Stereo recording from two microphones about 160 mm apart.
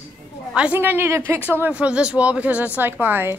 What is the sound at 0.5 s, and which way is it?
Speech, 10° right (ahead or behind).